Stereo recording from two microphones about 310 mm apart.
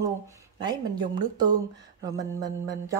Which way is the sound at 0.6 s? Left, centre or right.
Centre.